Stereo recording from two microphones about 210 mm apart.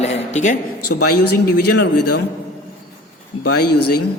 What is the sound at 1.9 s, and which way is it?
Speech, 90° left.